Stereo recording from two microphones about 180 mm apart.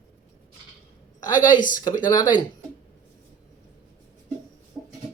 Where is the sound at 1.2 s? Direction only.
20° left (ahead or behind).